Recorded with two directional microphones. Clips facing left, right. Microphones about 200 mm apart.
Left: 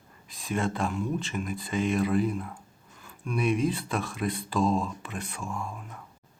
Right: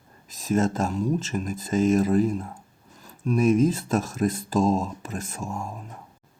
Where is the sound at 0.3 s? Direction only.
40° right (ahead or behind).